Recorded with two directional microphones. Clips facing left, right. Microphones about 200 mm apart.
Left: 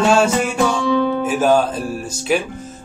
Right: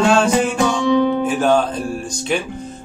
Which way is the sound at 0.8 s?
20° right (ahead or behind).